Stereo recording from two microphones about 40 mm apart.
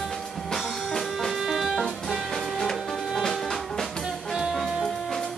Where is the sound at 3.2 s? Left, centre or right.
Centre.